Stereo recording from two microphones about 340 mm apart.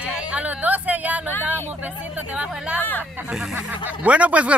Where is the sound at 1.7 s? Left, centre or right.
Centre.